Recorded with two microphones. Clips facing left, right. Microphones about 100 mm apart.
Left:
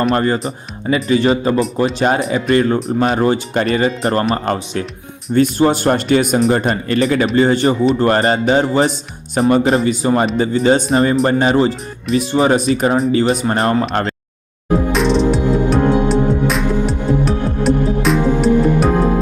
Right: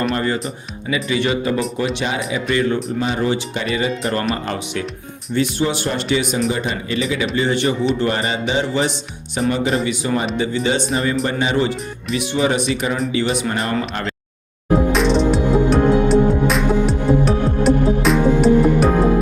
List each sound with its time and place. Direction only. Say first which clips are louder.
0.1 s speech: left 5 dB; 40° left (ahead or behind)
14.9 s music: left 1 dB; centre (ahead or behind)